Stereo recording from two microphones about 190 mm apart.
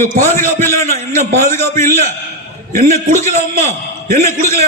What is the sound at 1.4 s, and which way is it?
Speech, 40° right (ahead or behind).